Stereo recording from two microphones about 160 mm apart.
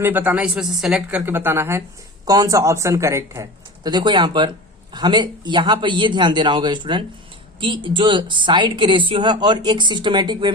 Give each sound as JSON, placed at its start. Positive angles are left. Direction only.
{"t": 0.0, "sound": "a woman's voice", "side_deg": -10}